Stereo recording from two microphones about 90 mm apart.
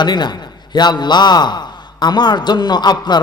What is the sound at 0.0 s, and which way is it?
A man's voice, 55° left (ahead or behind).